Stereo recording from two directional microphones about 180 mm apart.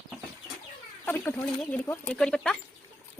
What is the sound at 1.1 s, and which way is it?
Speech, 10° left (ahead or behind).